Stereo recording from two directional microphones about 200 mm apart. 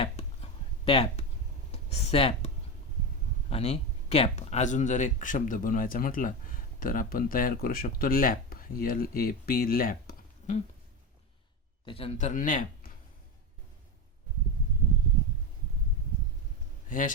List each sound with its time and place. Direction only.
0.9 s speech: 30° left (ahead or behind)
3.5 s speech: 30° left (ahead or behind)
11.9 s speech: 30° left (ahead or behind)